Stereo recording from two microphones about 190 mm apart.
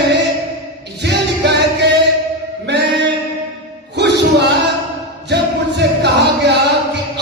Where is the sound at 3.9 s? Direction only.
60° right (ahead or behind).